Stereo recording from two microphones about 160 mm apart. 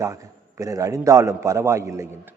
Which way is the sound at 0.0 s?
20° right (ahead or behind).